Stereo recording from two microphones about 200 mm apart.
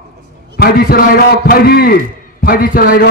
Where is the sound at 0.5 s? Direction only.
50° left (ahead or behind).